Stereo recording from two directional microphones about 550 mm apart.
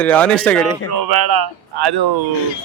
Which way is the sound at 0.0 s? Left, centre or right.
Centre.